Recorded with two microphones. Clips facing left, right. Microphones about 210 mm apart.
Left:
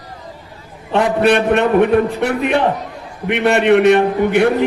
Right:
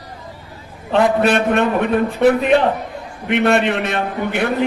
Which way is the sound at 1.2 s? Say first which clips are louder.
Left 2 dB; 65° left (ahead or behind).